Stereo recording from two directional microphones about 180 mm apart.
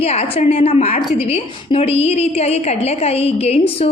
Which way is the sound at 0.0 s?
35° left (ahead or behind).